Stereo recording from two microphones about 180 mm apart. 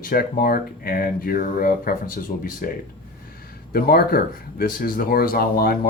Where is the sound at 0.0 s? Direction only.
55° left (ahead or behind).